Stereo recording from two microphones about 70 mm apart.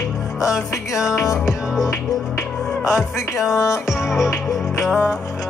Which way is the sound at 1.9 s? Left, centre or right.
Left.